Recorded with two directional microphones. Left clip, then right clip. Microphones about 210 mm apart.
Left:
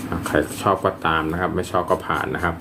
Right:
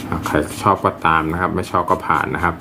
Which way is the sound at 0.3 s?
25° right (ahead or behind).